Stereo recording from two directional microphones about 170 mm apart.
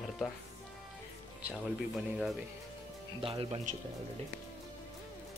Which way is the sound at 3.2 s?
35° right (ahead or behind).